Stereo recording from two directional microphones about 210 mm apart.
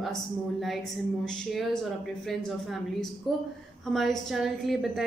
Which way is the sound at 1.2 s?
Centre (ahead or behind).